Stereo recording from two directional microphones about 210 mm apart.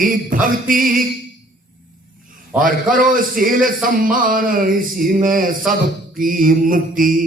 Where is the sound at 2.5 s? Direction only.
40° right (ahead or behind).